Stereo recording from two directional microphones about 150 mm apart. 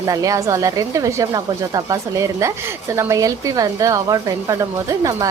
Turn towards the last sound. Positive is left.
turn(degrees=-25)  # may be behind; listen again after turning